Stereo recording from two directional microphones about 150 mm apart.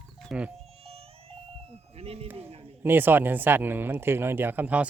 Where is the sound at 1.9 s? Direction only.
40° right (ahead or behind).